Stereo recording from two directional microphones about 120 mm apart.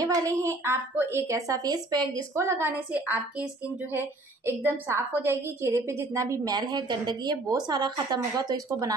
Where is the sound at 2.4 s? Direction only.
20° right (ahead or behind).